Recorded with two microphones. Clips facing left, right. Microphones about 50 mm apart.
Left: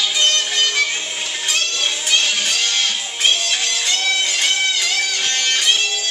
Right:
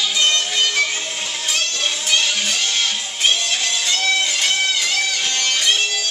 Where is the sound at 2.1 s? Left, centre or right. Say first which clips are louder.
Left 1 dB; left.